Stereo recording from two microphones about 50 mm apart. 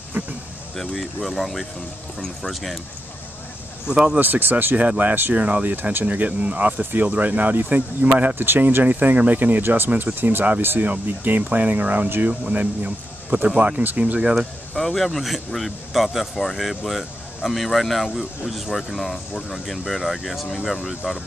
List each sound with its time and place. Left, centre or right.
0.2 s cricket: right
0.7 s speech: centre
3.8 s speech: centre
4.2 s speech: right
10.6 s speech: right
14.2 s speech: centre
14.8 s speech: centre